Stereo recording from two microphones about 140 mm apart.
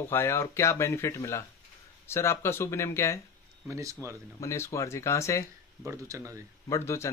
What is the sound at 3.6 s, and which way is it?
Speech, 20° right (ahead or behind).